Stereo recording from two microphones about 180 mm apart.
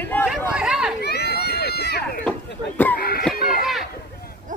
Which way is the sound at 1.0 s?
65° left (ahead or behind).